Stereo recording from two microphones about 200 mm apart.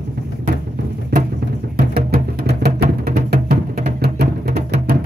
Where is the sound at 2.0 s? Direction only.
50° right (ahead or behind).